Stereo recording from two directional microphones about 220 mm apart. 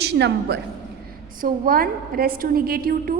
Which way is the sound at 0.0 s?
50° right (ahead or behind).